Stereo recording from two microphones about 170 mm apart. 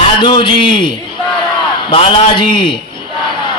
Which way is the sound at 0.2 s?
25° left (ahead or behind).